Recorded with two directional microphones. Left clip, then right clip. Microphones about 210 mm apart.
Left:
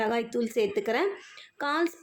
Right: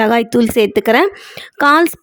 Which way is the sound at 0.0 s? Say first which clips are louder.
Right 15 dB; 50° right (ahead or behind).